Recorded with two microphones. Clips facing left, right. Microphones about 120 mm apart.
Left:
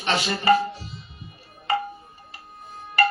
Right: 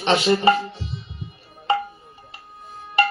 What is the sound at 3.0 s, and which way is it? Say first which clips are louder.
Music: right 1 dB; 20° right (ahead or behind).